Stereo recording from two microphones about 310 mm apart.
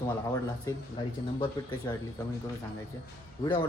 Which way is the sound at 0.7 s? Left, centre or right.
Centre.